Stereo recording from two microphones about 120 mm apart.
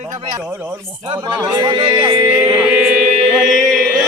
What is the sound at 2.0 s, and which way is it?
Music, 20° right (ahead or behind).